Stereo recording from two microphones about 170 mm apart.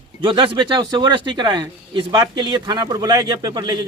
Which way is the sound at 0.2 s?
30° right (ahead or behind).